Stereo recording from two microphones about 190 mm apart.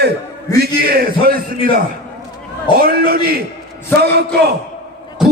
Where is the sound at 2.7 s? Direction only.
50° right (ahead or behind).